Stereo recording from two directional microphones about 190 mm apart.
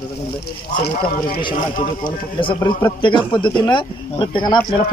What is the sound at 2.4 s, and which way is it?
Speech, 25° left (ahead or behind).